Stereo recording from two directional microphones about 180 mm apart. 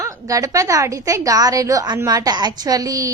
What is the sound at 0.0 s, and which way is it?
A woman's voice, 20° right (ahead or behind).